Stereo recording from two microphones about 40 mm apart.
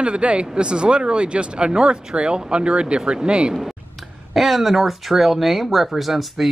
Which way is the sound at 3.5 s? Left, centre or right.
Centre.